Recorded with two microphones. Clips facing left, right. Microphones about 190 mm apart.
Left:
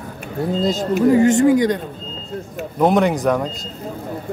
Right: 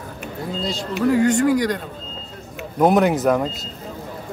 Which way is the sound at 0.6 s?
45° left (ahead or behind).